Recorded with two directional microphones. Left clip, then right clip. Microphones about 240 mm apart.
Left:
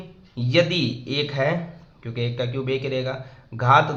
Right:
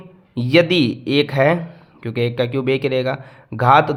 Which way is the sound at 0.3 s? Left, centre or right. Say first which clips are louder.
Right 6 dB; right.